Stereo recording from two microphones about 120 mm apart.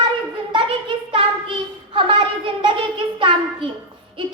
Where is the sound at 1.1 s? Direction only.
45° right (ahead or behind).